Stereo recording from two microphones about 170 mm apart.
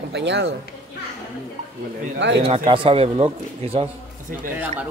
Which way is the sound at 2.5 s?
35° right (ahead or behind).